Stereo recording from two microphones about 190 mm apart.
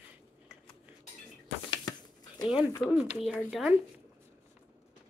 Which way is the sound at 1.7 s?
20° left (ahead or behind).